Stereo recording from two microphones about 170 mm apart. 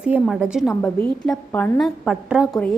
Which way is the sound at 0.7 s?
15° left (ahead or behind).